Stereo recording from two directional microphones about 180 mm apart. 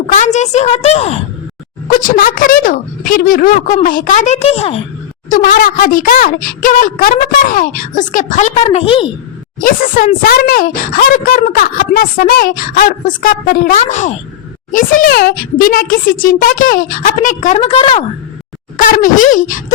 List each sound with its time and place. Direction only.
0.1 s a woman's voice: 40° left (ahead or behind)
1.9 s a woman's voice: 50° left (ahead or behind)
5.3 s a woman's voice: 50° left (ahead or behind); by 9.0 s 30° left (ahead or behind)
9.6 s a woman's voice: 50° left (ahead or behind); by 18.0 s 30° left (ahead or behind)
18.8 s a woman's voice: 50° left (ahead or behind)